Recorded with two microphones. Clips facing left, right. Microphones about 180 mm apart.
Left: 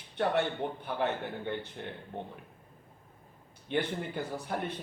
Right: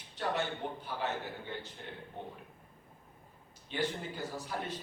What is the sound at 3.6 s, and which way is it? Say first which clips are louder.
A man's voice: left 4 dB; 60° left (ahead or behind).